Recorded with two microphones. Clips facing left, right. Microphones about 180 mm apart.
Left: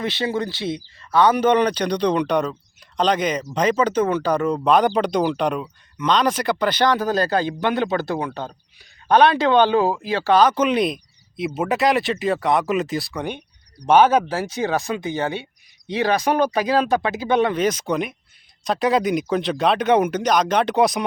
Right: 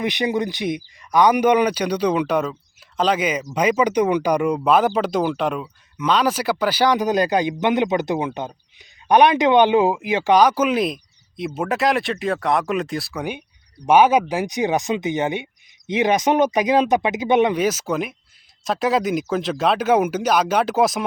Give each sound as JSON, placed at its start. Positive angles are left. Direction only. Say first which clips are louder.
{"t": 0.0, "sound": "speech", "louder": "right 2 dB", "side_deg": -15}